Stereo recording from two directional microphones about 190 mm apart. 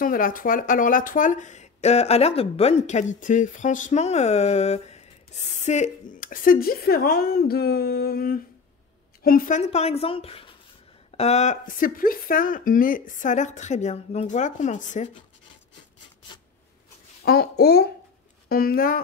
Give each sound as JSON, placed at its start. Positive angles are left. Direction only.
{"t": 0.0, "sound": "a woman's voice", "side_deg": 45}
{"t": 9.6, "sound": "speech", "side_deg": 35}
{"t": 17.2, "sound": "a woman's voice", "side_deg": 55}